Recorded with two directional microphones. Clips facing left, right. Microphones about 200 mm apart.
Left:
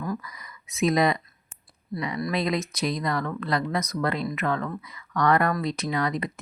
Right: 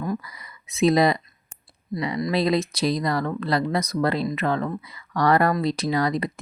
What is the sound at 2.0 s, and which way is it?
Speech, 30° right (ahead or behind).